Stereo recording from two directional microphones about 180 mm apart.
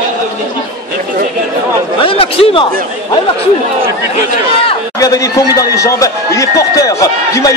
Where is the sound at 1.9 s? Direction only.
30° left (ahead or behind).